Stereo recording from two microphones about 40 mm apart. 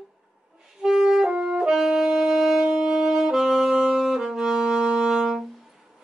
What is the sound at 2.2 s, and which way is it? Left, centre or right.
Wind instrument, centre.